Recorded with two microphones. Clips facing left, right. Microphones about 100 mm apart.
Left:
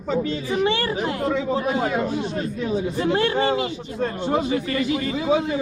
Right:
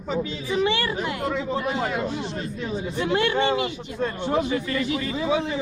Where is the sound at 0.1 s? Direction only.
40° left (ahead or behind).